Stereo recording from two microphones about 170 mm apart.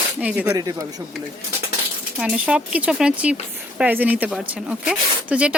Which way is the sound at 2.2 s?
5° right (ahead or behind).